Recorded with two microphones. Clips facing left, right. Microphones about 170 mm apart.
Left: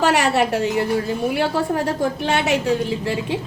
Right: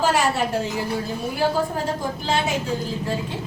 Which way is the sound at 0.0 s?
70° left (ahead or behind).